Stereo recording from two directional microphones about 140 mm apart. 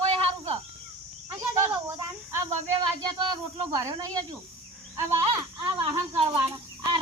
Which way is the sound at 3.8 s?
25° right (ahead or behind).